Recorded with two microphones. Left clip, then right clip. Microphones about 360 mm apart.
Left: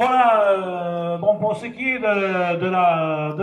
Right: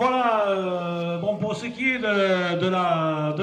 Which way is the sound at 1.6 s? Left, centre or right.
Centre.